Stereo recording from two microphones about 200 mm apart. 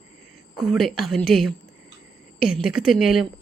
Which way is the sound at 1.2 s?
50° left (ahead or behind).